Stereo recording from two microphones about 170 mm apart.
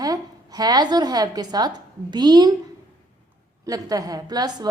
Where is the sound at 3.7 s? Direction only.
20° right (ahead or behind).